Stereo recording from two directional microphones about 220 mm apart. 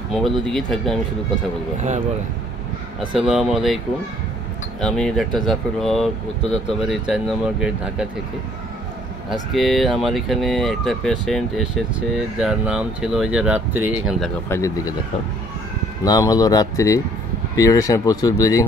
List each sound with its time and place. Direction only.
0.1 s speech: centre (ahead or behind)
1.8 s speech: 30° right (ahead or behind)
3.2 s speech: centre (ahead or behind)
9.5 s speech: centre (ahead or behind)
14.2 s speech: 10° left (ahead or behind)
16.0 s speech: 15° left (ahead or behind)